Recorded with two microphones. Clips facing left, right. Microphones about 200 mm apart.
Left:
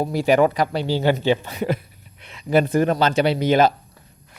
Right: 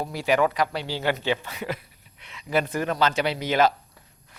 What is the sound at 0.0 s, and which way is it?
A man's voice, 40° left (ahead or behind).